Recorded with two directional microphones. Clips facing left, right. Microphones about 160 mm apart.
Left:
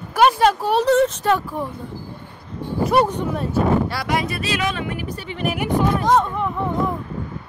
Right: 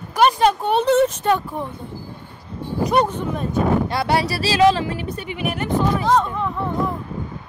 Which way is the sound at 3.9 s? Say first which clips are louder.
Right 3 dB; 30° right (ahead or behind).